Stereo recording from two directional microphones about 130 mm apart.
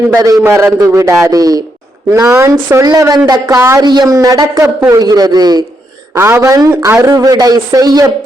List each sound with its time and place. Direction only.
0.1 s a man's voice: 25° right (ahead or behind)
6.1 s a man's voice: 20° right (ahead or behind)